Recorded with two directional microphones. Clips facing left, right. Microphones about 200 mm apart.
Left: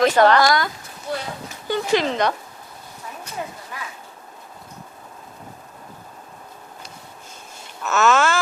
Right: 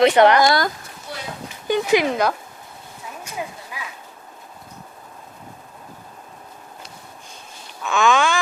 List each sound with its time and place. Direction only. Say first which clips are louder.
0.0 s speech: right 2 dB; 20° right (ahead or behind)
1.6 s speech: right 2 dB; 15° right (ahead or behind)
3.7 s a sound: left 1 dB; 10° right (ahead or behind)
7.8 s speech: even; 5° left (ahead or behind)